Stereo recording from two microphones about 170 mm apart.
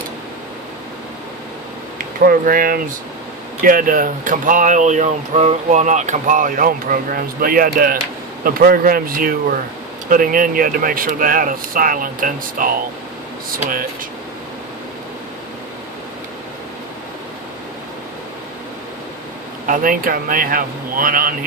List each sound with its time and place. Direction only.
2.2 s speech: 55° right (ahead or behind)
19.6 s speech: 55° right (ahead or behind)